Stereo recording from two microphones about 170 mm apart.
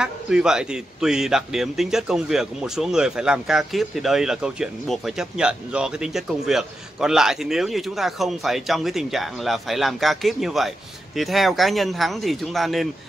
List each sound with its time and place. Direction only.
0.0 s a man's voice: 5° right (ahead or behind)